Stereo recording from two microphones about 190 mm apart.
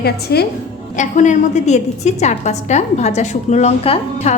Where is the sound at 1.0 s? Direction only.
40° left (ahead or behind).